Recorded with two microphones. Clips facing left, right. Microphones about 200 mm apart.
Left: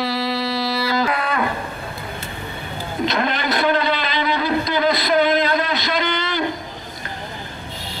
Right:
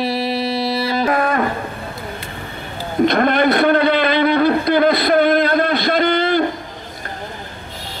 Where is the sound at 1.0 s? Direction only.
45° right (ahead or behind).